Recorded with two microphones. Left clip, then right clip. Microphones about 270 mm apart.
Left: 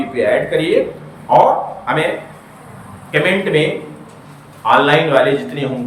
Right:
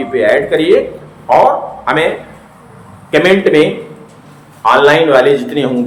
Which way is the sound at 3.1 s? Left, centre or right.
Centre.